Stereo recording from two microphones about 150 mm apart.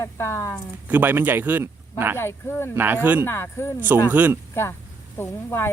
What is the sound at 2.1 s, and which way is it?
Speech, 15° left (ahead or behind).